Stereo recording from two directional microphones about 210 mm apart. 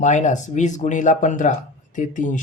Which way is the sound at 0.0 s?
35° left (ahead or behind).